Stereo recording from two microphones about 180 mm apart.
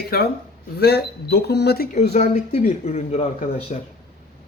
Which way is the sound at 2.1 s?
40° left (ahead or behind).